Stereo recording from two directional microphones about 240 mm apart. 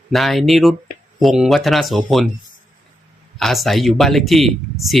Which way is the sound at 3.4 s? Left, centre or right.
Centre.